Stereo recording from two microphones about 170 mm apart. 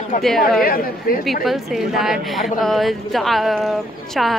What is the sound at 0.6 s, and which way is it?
Speech, 60° left (ahead or behind).